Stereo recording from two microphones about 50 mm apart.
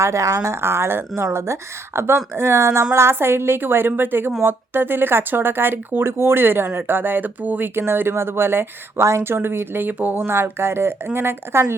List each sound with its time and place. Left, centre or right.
0.0 s speech: right
0.6 s speech: right
7.8 s speech: right
10.2 s speech: right